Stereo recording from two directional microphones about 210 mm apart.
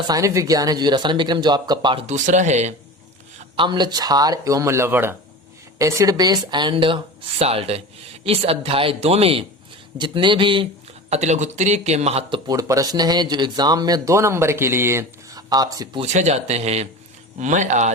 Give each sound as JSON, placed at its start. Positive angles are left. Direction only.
{"t": 0.1, "sound": "speech", "side_deg": -15}
{"t": 3.5, "sound": "speech", "side_deg": -20}
{"t": 12.5, "sound": "speech", "side_deg": -15}
{"t": 16.0, "sound": "speech", "side_deg": -35}